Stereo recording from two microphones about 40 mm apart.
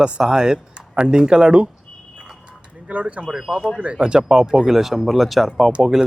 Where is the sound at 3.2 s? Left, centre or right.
Centre.